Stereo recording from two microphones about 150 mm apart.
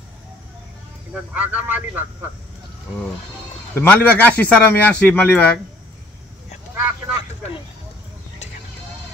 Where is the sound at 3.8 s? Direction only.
10° left (ahead or behind).